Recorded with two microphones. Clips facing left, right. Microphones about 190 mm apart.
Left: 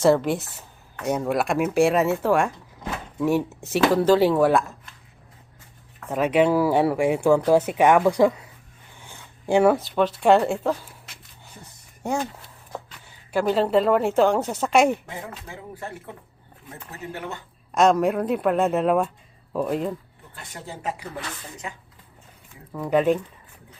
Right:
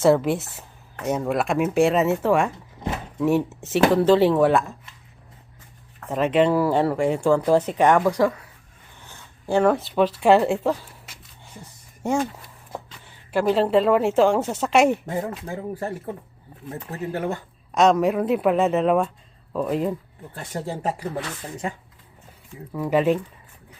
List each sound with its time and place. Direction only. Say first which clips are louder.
0.0 s a woman's voice: right 1 dB; centre (ahead or behind)
6.1 s speech: even; centre (ahead or behind)
9.0 s zipper: left 1 dB; 15° left (ahead or behind)
9.7 s a woman's voice: right 1 dB; centre (ahead or behind)
13.3 s a woman's voice: right 1 dB; centre (ahead or behind)
15.0 s speech: right 9 dB; 40° right (ahead or behind)
17.7 s a woman's voice: right 1 dB; centre (ahead or behind)
20.3 s speech: right 8 dB; 40° right (ahead or behind)
22.7 s a woman's voice: even; 5° right (ahead or behind)